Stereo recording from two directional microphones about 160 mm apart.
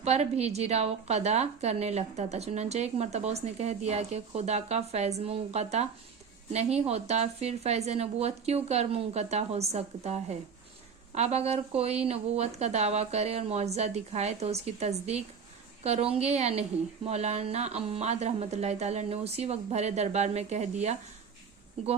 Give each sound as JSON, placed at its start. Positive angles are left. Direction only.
{"t": 0.0, "sound": "a woman's voice", "side_deg": -45}